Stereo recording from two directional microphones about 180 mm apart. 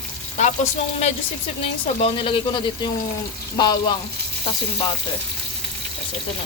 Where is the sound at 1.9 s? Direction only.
30° left (ahead or behind).